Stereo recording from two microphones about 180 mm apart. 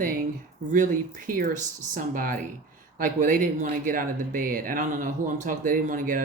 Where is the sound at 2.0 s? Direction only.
50° right (ahead or behind).